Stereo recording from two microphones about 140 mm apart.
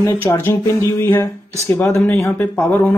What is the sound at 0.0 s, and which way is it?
Speech, 20° left (ahead or behind).